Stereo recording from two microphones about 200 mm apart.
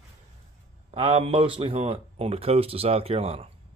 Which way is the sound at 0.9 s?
30° right (ahead or behind).